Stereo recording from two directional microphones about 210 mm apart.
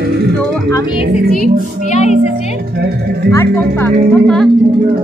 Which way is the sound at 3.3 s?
5° left (ahead or behind).